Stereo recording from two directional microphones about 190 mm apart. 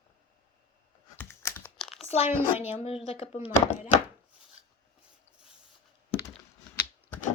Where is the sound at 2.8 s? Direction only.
30° left (ahead or behind).